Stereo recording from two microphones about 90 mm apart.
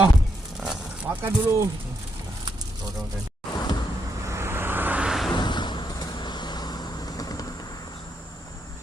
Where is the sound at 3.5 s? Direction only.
50° left (ahead or behind).